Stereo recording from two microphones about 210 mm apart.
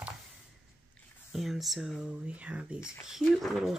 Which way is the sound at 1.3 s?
Centre (ahead or behind).